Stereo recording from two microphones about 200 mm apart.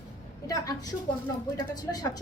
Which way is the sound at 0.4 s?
20° left (ahead or behind).